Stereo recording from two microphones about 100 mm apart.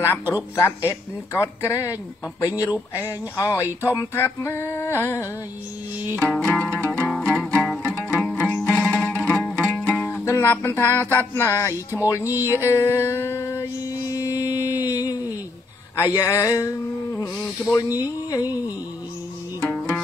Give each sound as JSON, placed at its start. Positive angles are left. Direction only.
{"t": 0.6, "sound": "a sound", "side_deg": 25}
{"t": 2.4, "sound": "speech", "side_deg": 35}
{"t": 2.9, "sound": "a sound", "side_deg": 30}
{"t": 6.1, "sound": "music", "side_deg": 10}
{"t": 8.5, "sound": "music", "side_deg": 15}
{"t": 8.8, "sound": "music", "side_deg": 5}
{"t": 9.2, "sound": "music", "side_deg": 20}
{"t": 10.2, "sound": "a sound", "side_deg": 25}
{"t": 12.4, "sound": "music", "side_deg": 30}
{"t": 14.8, "sound": "a sound", "side_deg": 40}
{"t": 16.0, "sound": "speech", "side_deg": 30}
{"t": 17.7, "sound": "speech", "side_deg": 35}
{"t": 19.6, "sound": "music", "side_deg": 20}